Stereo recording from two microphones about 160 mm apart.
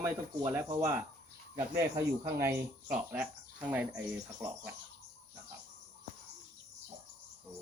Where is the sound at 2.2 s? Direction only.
20° right (ahead or behind).